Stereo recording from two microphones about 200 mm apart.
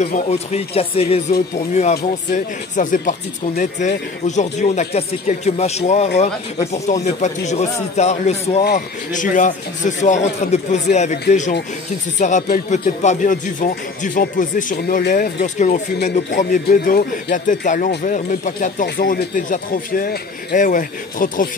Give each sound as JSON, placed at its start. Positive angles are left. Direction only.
{"t": 0.0, "sound": "speech", "side_deg": 35}
{"t": 12.2, "sound": "speech", "side_deg": 40}
{"t": 15.4, "sound": "speech", "side_deg": 35}